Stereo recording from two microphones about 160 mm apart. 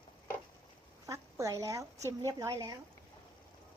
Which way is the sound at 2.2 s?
20° right (ahead or behind).